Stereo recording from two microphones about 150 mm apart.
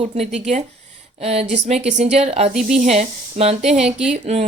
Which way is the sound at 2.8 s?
50° right (ahead or behind).